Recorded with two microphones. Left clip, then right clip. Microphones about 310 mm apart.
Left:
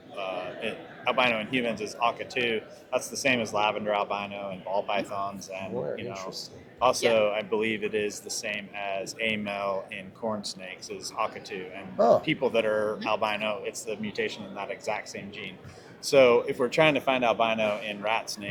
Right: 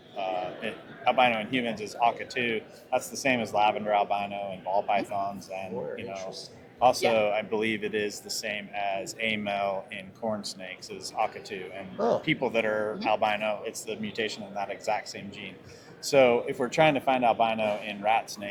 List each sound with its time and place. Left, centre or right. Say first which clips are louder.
0.2 s a man's voice: right 2 dB; centre
11.9 s speech: left 6 dB; left
12.2 s a man's voice: left 1 dB; centre